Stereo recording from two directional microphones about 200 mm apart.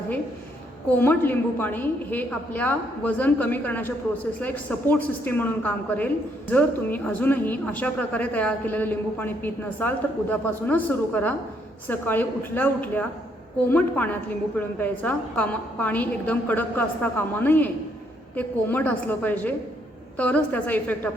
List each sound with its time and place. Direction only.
0.9 s speech: 10° left (ahead or behind)